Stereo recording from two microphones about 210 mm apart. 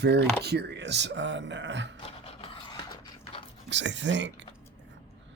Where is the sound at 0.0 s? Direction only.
50° right (ahead or behind).